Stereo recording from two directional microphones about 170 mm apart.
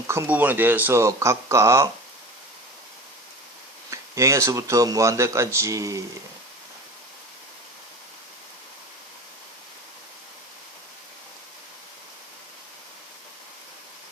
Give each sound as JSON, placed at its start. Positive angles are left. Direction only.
{"t": 0.1, "sound": "speech", "side_deg": -15}
{"t": 3.8, "sound": "speech", "side_deg": -20}